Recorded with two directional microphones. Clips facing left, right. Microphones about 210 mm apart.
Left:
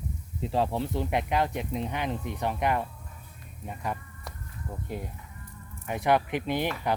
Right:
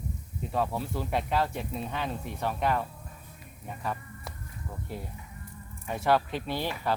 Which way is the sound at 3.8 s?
15° left (ahead or behind).